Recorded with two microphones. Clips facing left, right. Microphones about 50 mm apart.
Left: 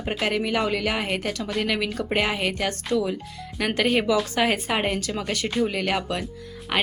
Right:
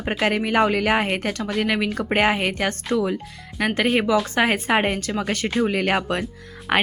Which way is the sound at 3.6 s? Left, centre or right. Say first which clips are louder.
Right 2 dB; right.